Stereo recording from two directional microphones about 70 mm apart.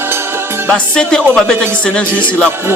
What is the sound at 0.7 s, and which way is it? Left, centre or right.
A man's voice, centre.